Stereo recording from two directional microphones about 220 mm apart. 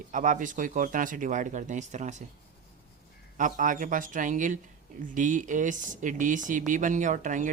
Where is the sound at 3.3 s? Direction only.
35° right (ahead or behind).